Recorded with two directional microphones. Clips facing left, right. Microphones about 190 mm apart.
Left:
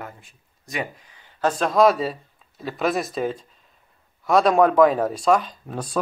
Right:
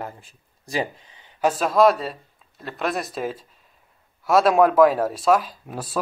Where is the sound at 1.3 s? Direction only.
5° right (ahead or behind).